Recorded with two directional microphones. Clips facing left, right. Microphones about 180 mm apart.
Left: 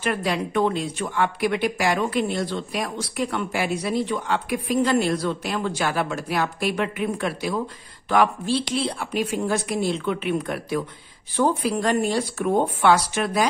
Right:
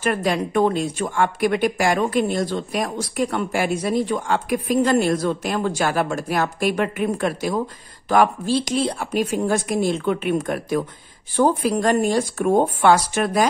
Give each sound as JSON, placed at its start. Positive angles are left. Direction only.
{"t": 0.0, "sound": "speech", "side_deg": -45}